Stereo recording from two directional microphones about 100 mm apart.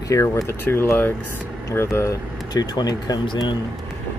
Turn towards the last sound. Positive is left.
turn(degrees=50)  # may be behind; listen again after turning